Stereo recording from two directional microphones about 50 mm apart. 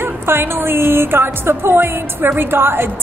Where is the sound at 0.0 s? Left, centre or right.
Right.